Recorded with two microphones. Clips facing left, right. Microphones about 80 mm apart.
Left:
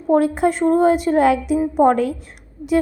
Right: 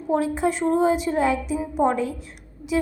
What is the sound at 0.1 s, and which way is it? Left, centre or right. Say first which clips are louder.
A woman's voice: left 6 dB; left.